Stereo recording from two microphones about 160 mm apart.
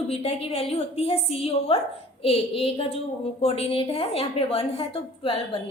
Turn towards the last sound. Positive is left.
turn(degrees=35)  # may be behind; listen again after turning